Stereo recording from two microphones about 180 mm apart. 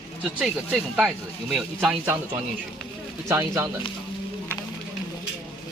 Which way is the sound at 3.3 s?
15° right (ahead or behind).